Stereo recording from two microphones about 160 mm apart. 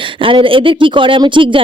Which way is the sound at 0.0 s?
30° right (ahead or behind).